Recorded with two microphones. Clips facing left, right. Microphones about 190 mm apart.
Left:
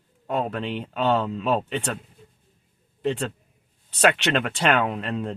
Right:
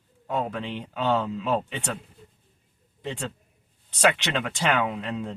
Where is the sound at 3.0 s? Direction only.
60° left (ahead or behind).